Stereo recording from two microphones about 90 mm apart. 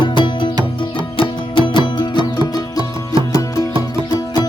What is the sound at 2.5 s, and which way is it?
Music, 50° left (ahead or behind).